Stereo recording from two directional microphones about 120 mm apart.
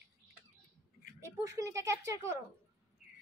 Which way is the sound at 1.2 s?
25° right (ahead or behind).